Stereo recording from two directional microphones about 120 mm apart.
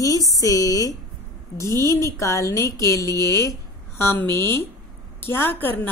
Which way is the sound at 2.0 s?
25° left (ahead or behind).